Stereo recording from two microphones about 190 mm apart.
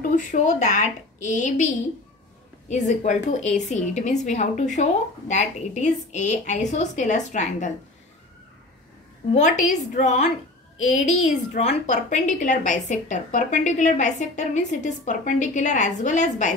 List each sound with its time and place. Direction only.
0.1 s a woman's voice: 40° left (ahead or behind)
2.7 s a woman's voice: 40° left (ahead or behind)
9.3 s a woman's voice: 40° left (ahead or behind)